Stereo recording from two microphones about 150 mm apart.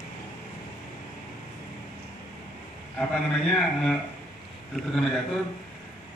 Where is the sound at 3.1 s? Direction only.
5° left (ahead or behind).